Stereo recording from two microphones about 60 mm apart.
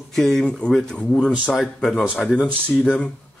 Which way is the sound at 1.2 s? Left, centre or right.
Centre.